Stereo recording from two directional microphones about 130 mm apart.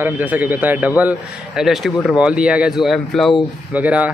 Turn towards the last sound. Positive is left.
turn(degrees=-10)  # may be behind; listen again after turning